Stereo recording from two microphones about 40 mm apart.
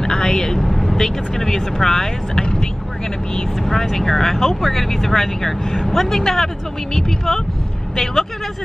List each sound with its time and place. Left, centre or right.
0.0 s vehicle: centre
3.3 s speech: centre